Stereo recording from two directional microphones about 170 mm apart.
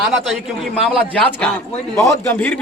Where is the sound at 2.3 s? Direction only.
10° left (ahead or behind).